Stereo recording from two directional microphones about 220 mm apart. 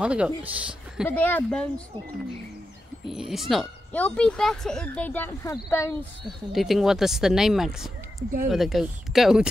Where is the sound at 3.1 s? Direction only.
Centre (ahead or behind).